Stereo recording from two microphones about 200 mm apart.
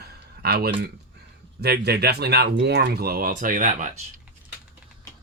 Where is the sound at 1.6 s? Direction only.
55° right (ahead or behind); by 3.9 s 40° right (ahead or behind).